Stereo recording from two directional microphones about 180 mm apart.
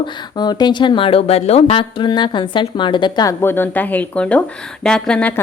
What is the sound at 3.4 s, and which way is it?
A woman's voice, 10° left (ahead or behind).